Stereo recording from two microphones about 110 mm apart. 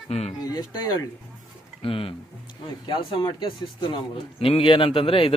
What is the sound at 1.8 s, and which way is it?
A man's voice, 55° left (ahead or behind).